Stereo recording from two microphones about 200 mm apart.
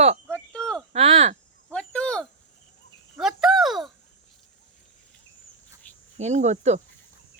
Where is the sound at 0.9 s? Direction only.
35° right (ahead or behind).